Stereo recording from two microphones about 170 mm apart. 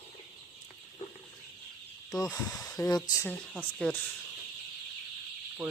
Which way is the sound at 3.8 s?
5° left (ahead or behind).